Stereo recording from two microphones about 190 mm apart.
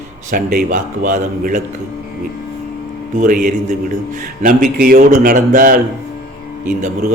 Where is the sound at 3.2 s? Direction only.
45° right (ahead or behind).